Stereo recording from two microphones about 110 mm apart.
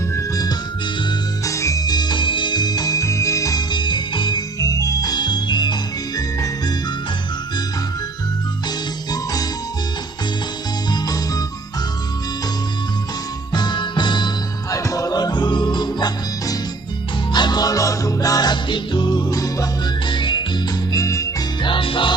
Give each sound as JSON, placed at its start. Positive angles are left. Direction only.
{"t": 0.2, "sound": "music", "side_deg": 35}
{"t": 10.9, "sound": "music", "side_deg": 35}
{"t": 13.5, "sound": "music", "side_deg": 40}
{"t": 14.7, "sound": "music", "side_deg": 30}
{"t": 20.1, "sound": "music", "side_deg": 45}
{"t": 20.9, "sound": "music", "side_deg": 30}
{"t": 21.6, "sound": "music", "side_deg": 50}